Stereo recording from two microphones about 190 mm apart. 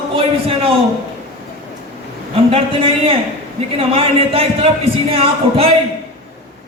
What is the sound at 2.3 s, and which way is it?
A man's voice, 30° right (ahead or behind).